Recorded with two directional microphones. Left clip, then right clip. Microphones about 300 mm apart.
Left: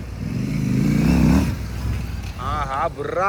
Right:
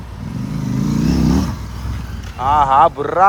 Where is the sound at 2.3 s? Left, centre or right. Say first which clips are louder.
Right 13 dB; centre.